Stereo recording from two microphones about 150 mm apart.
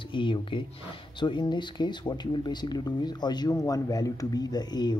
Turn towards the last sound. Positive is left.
turn(degrees=30)  # may be behind; listen again after turning